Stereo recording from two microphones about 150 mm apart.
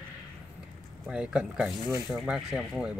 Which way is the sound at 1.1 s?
5° right (ahead or behind).